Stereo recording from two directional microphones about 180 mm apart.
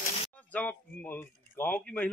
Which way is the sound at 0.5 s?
10° left (ahead or behind).